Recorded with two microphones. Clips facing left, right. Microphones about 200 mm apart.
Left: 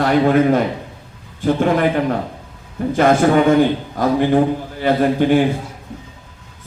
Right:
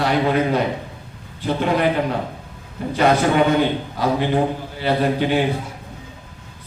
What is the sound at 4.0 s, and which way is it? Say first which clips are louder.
A man's voice: left 5 dB; 50° left (ahead or behind).